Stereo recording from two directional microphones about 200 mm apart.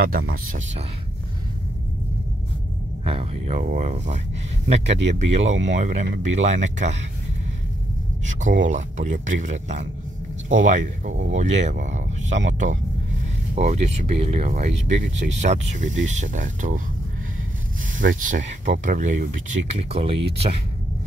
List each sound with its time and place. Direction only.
0.3 s speech: 40° right (ahead or behind)
3.1 s speech: 30° right (ahead or behind)
8.3 s speech: 40° right (ahead or behind)
17.9 s speech: 40° right (ahead or behind)